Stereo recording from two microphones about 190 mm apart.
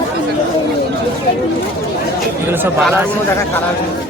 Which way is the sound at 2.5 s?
10° right (ahead or behind).